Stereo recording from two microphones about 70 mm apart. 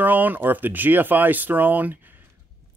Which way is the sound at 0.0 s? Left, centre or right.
Right.